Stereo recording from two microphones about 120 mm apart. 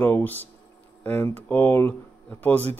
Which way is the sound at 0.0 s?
15° left (ahead or behind).